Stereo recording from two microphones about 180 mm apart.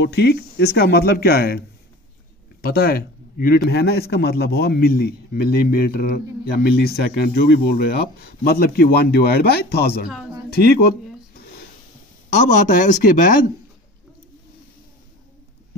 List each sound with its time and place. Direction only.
0.0 s a man's voice: 70° left (ahead or behind)
2.6 s a man's voice: 55° left (ahead or behind)
12.3 s speech: 45° left (ahead or behind)